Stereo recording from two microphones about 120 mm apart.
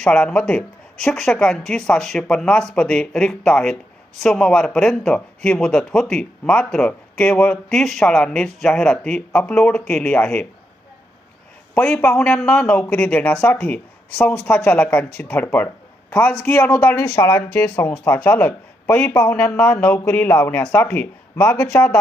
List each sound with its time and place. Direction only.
0.0 s speech: 5° left (ahead or behind)
11.9 s speech: 10° left (ahead or behind)